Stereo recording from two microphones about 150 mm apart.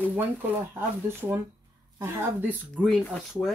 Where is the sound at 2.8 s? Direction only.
Centre (ahead or behind).